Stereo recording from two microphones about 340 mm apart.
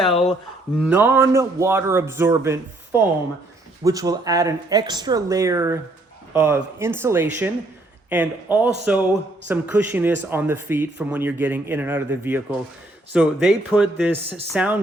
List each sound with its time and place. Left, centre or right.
0.1 s speech: centre
0.8 s a man's voice: centre